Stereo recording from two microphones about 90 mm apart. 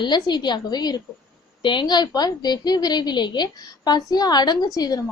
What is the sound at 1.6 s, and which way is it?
A woman's voice, 60° left (ahead or behind).